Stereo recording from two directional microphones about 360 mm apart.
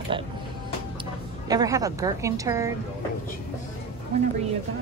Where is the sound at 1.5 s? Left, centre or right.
Centre.